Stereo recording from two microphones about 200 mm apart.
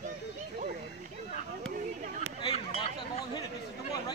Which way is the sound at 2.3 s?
30° left (ahead or behind).